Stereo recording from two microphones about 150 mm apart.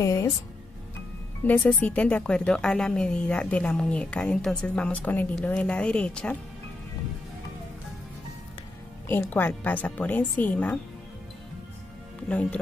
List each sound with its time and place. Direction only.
0.0 s speech: 20° left (ahead or behind)
1.4 s a woman's voice: 10° left (ahead or behind)
9.0 s a woman's voice: 15° left (ahead or behind)
12.3 s a woman's voice: 10° left (ahead or behind)